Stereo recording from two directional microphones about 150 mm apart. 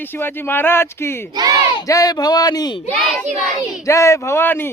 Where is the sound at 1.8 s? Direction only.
25° left (ahead or behind).